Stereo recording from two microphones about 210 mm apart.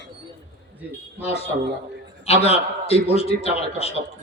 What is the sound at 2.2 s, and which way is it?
A man's voice, 30° left (ahead or behind).